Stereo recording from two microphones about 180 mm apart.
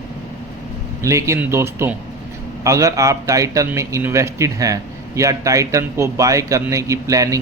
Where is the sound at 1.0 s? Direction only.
15° right (ahead or behind).